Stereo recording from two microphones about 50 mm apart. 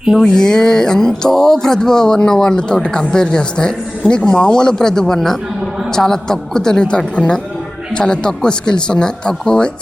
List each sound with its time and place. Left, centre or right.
0.2 s speech: centre